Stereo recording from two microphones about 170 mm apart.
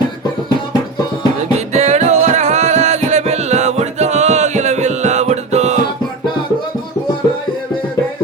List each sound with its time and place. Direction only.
1.4 s music: 40° right (ahead or behind)